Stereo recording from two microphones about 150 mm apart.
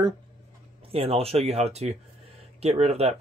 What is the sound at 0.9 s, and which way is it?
Speech, 40° right (ahead or behind).